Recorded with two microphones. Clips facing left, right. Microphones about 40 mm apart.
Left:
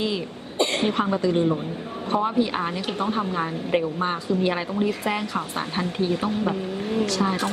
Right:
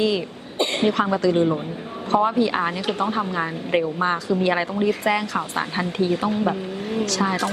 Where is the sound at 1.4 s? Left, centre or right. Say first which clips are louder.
Right 2 dB; centre.